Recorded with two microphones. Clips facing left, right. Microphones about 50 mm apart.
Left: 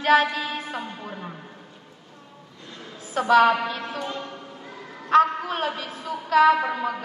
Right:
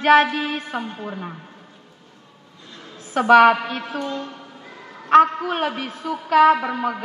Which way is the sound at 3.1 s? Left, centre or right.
Right.